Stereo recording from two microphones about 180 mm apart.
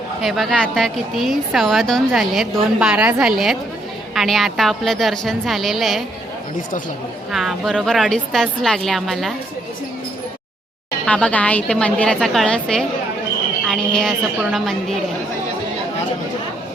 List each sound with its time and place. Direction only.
0.2 s a woman's voice: centre (ahead or behind)
7.3 s a woman's voice: centre (ahead or behind)
11.0 s a woman's voice: 5° left (ahead or behind)